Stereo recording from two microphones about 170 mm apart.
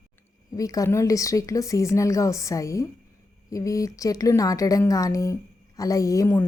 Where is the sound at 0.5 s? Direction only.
20° left (ahead or behind).